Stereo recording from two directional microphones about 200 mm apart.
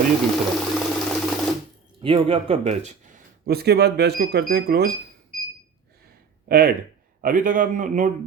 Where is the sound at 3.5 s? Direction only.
55° right (ahead or behind).